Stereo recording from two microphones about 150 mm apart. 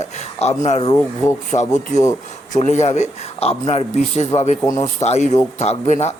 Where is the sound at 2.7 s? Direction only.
50° left (ahead or behind).